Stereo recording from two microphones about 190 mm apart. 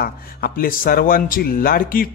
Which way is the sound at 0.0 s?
50° left (ahead or behind).